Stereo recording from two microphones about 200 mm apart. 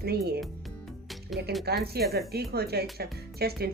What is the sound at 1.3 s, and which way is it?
Speech, centre (ahead or behind).